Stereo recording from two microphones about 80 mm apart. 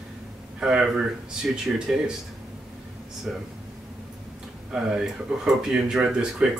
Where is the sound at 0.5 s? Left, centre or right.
Centre.